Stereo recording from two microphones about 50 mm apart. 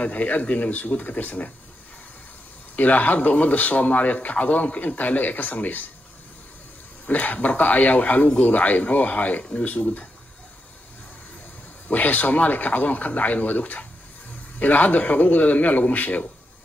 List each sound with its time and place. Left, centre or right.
0.0 s speech: left
2.7 s speech: left
7.1 s speech: left
11.9 s speech: left